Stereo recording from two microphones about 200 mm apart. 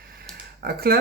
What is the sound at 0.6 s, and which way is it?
Speech, 50° right (ahead or behind).